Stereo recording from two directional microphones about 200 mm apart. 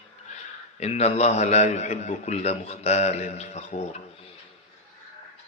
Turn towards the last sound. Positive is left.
turn(degrees=35)  # may be behind; listen again after turning